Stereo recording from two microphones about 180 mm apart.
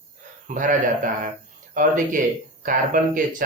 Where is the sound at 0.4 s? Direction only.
45° right (ahead or behind).